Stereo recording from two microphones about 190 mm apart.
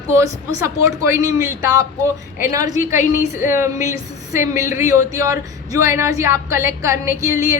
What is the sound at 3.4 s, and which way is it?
Speech, 15° right (ahead or behind).